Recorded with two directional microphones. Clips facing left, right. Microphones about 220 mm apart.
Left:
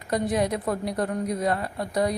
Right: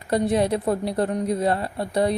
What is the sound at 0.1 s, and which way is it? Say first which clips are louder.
A woman's voice: right 4 dB; 30° right (ahead or behind).